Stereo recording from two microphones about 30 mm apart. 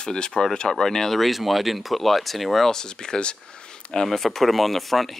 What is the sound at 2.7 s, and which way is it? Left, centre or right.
Speech, left.